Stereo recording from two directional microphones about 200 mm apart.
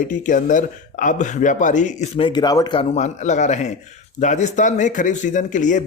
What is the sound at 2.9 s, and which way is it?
Speech, 35° left (ahead or behind).